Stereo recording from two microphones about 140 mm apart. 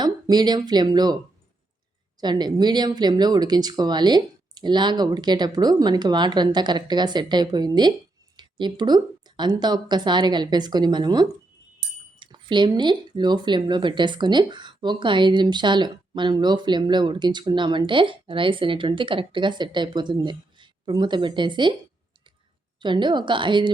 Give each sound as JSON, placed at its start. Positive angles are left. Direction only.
{"t": 0.0, "sound": "speech", "side_deg": -30}
{"t": 2.2, "sound": "speech", "side_deg": -30}
{"t": 22.8, "sound": "speech", "side_deg": -35}